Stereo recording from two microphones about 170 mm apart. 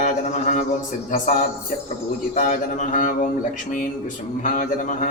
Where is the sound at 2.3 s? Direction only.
50° left (ahead or behind).